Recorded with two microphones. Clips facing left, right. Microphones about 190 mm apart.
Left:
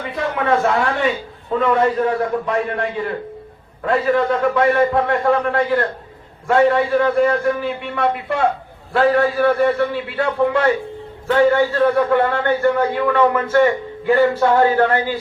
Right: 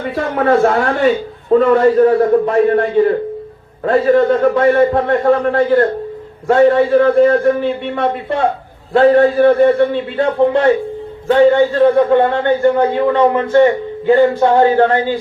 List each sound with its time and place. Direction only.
0.0 s a man's voice: 40° right (ahead or behind)
7.9 s a man's voice: 20° right (ahead or behind)